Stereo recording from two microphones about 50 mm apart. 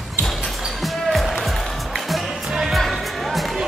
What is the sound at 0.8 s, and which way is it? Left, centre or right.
Music, centre.